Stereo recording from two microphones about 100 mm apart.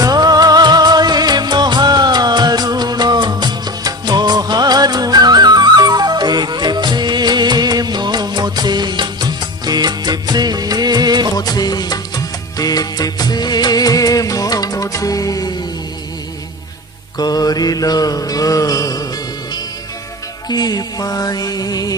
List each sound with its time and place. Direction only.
0.0 s music: 40° right (ahead or behind)
11.3 s music: 40° left (ahead or behind)
17.2 s mantra: 40° left (ahead or behind)
20.5 s music: 45° left (ahead or behind)